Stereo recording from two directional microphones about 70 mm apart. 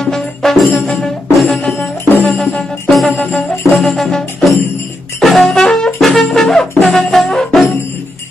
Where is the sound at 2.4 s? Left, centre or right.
Centre.